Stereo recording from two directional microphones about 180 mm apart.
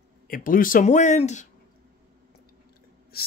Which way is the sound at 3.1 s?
60° left (ahead or behind).